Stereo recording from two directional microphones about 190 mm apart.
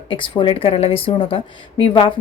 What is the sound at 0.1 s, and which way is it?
A woman's voice, 25° left (ahead or behind).